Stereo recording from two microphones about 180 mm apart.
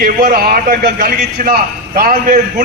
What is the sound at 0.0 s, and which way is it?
A man's voice, 55° right (ahead or behind).